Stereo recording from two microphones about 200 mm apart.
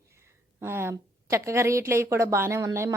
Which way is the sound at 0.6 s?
10° right (ahead or behind).